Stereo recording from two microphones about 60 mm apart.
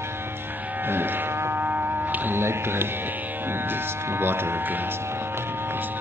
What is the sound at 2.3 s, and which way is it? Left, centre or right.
Music, right.